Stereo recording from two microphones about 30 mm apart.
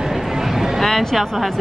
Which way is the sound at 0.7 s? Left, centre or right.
Centre.